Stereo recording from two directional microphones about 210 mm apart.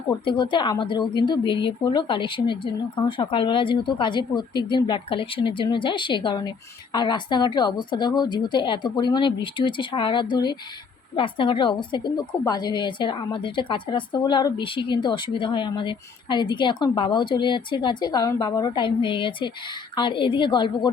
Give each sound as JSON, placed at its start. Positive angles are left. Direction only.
{"t": 0.3, "sound": "a woman's voice", "side_deg": 25}